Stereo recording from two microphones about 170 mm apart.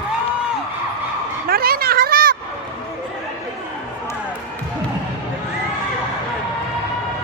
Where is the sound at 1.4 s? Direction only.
60° right (ahead or behind).